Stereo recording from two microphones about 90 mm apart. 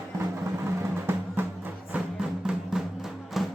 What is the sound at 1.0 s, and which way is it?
Music, 25° right (ahead or behind).